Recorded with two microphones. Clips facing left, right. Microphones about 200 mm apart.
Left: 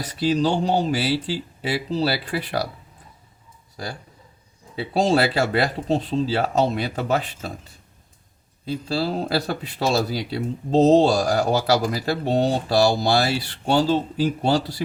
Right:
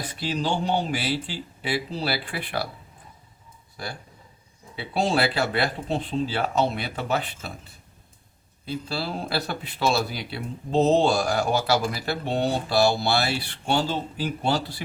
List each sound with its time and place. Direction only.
0.1 s speech: 40° left (ahead or behind)
4.8 s speech: 40° left (ahead or behind)
8.6 s speech: 35° left (ahead or behind)